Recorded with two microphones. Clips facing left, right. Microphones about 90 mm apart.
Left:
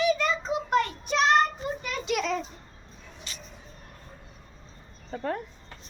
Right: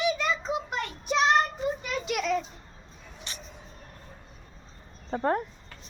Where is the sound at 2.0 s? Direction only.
5° right (ahead or behind).